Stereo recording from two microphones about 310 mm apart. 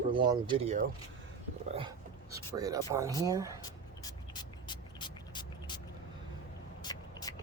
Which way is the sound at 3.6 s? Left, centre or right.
Centre.